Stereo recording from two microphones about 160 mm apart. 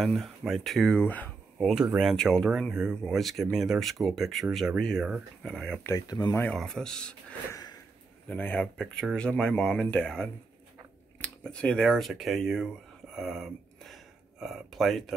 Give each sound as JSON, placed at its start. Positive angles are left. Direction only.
{"t": 0.0, "sound": "speech", "side_deg": 0}
{"t": 5.9, "sound": "speech", "side_deg": 20}
{"t": 6.3, "sound": "speech", "side_deg": 5}
{"t": 7.5, "sound": "a sound", "side_deg": 25}
{"t": 8.3, "sound": "speech", "side_deg": 10}
{"t": 13.1, "sound": "a sound", "side_deg": 0}